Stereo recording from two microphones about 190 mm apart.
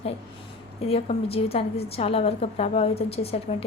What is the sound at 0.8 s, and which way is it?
A woman's voice, 30° left (ahead or behind).